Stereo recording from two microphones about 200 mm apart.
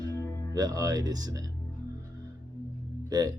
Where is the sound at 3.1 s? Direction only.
20° right (ahead or behind).